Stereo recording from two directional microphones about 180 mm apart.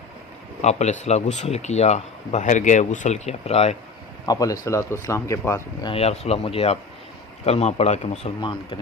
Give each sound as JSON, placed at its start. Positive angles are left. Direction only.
{"t": 0.6, "sound": "speech", "side_deg": 40}
{"t": 4.3, "sound": "speech", "side_deg": 20}
{"t": 5.9, "sound": "speech", "side_deg": 35}